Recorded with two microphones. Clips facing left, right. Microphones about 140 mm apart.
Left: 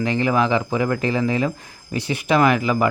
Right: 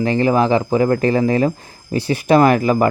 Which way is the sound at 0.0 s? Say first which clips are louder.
Right 4 dB; 35° right (ahead or behind).